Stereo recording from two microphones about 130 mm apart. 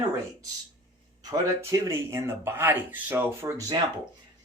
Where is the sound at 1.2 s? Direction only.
30° right (ahead or behind).